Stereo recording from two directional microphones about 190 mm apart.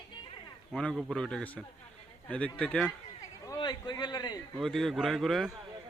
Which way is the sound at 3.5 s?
20° left (ahead or behind).